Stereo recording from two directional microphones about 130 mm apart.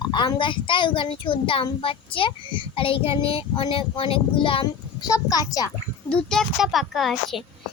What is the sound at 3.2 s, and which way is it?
Child singing, 45° left (ahead or behind).